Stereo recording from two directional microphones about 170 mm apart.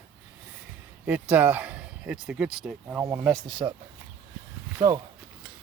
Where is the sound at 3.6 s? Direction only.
20° right (ahead or behind).